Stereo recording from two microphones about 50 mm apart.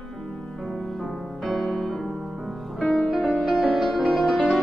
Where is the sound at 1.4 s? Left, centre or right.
Centre.